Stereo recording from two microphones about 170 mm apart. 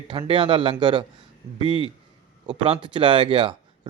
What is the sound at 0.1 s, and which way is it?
Speech, 30° right (ahead or behind).